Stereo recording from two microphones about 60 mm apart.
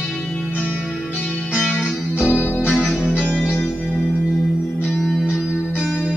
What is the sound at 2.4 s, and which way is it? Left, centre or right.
Music, left.